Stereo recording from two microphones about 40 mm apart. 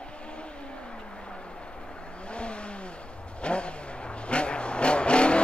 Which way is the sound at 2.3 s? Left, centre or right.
Left.